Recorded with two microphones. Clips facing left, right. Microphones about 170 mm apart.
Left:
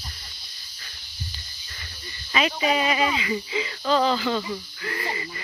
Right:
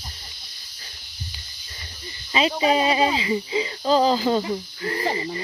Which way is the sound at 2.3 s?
30° right (ahead or behind).